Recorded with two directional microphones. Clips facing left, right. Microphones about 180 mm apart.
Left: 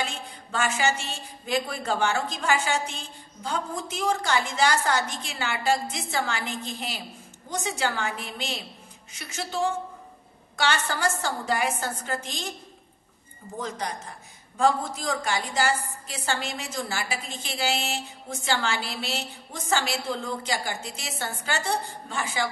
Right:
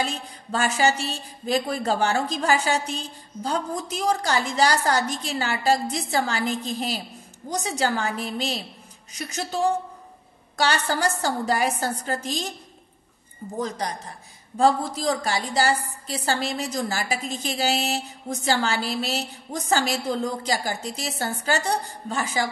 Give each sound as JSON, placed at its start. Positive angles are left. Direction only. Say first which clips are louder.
{"t": 0.0, "sound": "a woman's voice", "louder": "right 4 dB", "side_deg": -35}
{"t": 14.6, "sound": "a woman's voice", "louder": "right 3 dB", "side_deg": -35}